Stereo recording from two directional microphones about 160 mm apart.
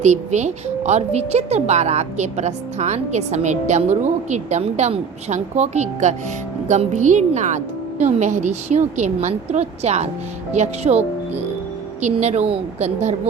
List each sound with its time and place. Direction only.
0.0 s speech: 45° right (ahead or behind)